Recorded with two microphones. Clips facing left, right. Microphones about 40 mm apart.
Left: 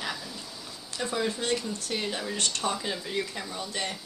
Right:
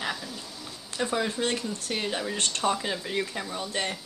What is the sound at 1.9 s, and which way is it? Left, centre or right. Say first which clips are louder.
Speech: right 2 dB; centre.